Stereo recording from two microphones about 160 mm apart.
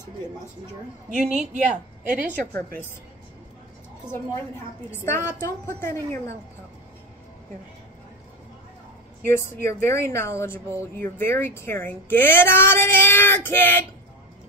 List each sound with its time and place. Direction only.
1.3 s a woman's voice: 50° right (ahead or behind)
2.5 s speech: 15° left (ahead or behind)
5.0 s speech: 15° left (ahead or behind)
9.2 s speech: 15° left (ahead or behind)